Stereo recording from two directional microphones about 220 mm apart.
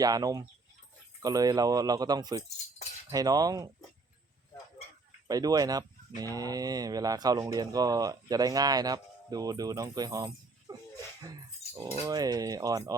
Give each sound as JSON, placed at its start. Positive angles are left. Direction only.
{"t": 0.0, "sound": "speech", "side_deg": -15}
{"t": 5.3, "sound": "speech", "side_deg": -15}